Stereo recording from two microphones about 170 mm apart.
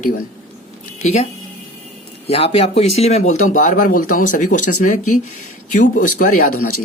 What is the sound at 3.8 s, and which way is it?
Speech, 55° left (ahead or behind).